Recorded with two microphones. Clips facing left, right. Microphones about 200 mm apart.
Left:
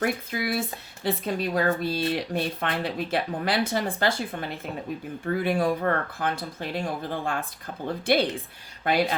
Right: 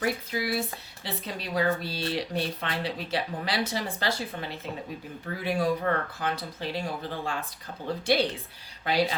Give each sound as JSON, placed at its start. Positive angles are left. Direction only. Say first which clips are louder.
{"t": 0.0, "sound": "a woman's voice", "louder": "left 2 dB", "side_deg": 50}